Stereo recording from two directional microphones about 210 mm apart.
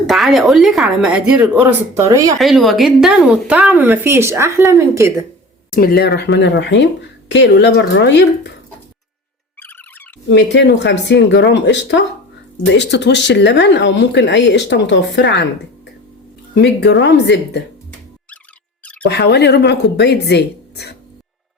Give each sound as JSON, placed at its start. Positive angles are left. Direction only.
{"t": 0.1, "sound": "speech", "side_deg": 0}
{"t": 2.0, "sound": "speech", "side_deg": -15}
{"t": 2.4, "sound": "speech", "side_deg": 0}
{"t": 5.7, "sound": "speech", "side_deg": 45}
{"t": 9.6, "sound": "a sound", "side_deg": 10}
{"t": 10.2, "sound": "speech", "side_deg": 55}
{"t": 16.6, "sound": "speech", "side_deg": 55}
{"t": 19.0, "sound": "speech", "side_deg": 55}